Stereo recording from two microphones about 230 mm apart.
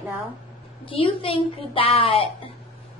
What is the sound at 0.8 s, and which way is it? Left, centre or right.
A woman's voice, left.